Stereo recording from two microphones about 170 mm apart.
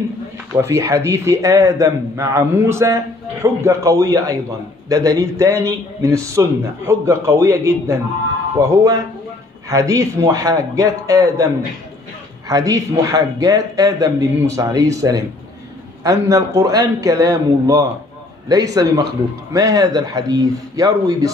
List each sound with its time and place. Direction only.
0.6 s a man's voice: 15° right (ahead or behind)
12.4 s a man's voice: 20° right (ahead or behind)